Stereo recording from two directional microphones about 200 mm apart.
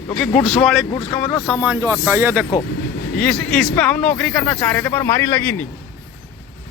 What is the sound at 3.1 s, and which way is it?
Speech, 5° left (ahead or behind).